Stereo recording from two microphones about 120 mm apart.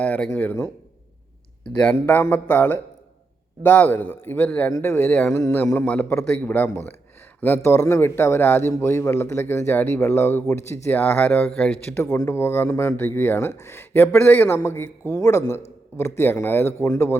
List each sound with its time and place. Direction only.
0.0 s a man's voice: 10° left (ahead or behind)
1.6 s a man's voice: 10° left (ahead or behind)
12.2 s a man's voice: 20° left (ahead or behind)